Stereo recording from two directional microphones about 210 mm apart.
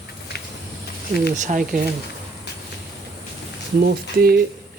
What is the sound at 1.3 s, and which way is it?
Speech, 35° right (ahead or behind).